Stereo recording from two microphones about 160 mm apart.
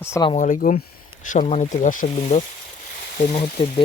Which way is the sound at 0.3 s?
55° left (ahead or behind).